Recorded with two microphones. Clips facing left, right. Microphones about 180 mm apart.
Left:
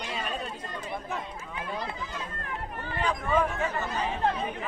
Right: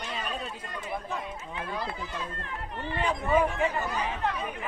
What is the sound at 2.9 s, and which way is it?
Speech, 25° right (ahead or behind).